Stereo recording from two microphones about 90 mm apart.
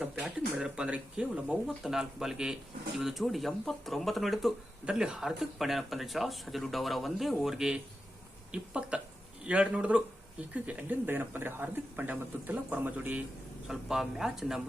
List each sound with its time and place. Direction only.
0.0 s speech: 10° right (ahead or behind)
13.7 s speech: 5° right (ahead or behind)